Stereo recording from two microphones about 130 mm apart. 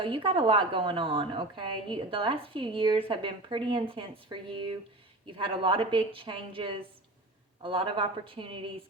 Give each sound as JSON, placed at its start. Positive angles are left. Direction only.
{"t": 0.0, "sound": "a woman's voice", "side_deg": -40}